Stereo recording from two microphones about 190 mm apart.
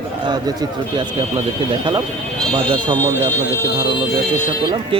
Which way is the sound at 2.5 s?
25° right (ahead or behind).